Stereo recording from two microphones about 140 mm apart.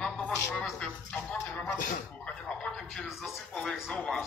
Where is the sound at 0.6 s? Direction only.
5° left (ahead or behind).